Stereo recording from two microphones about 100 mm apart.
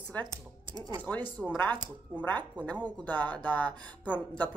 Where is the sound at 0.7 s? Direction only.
50° right (ahead or behind).